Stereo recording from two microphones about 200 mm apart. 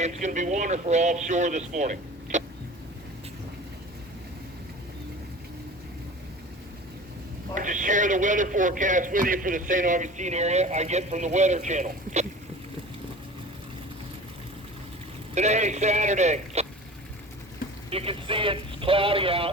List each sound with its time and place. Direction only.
0.0 s a man's voice: 35° right (ahead or behind)
7.5 s a man's voice: 40° right (ahead or behind)
15.4 s a man's voice: 35° right (ahead or behind)
17.9 s speech: 30° right (ahead or behind)